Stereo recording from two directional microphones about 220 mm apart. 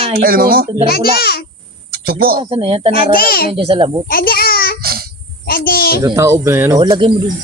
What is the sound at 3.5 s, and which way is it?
Speech, 25° right (ahead or behind).